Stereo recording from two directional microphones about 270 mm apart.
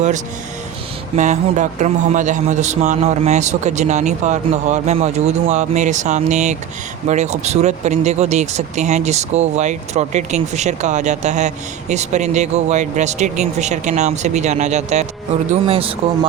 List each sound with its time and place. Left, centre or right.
1.1 s speech: right